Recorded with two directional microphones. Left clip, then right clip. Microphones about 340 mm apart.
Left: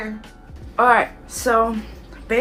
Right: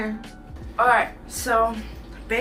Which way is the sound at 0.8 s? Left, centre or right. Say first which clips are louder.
Left 3 dB; centre.